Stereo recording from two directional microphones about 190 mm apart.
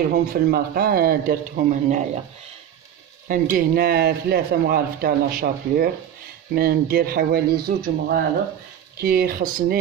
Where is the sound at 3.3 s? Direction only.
45° right (ahead or behind).